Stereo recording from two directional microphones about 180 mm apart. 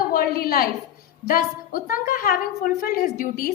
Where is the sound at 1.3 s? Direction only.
50° left (ahead or behind).